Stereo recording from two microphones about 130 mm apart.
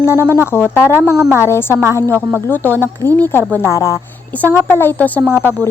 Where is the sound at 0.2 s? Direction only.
20° right (ahead or behind).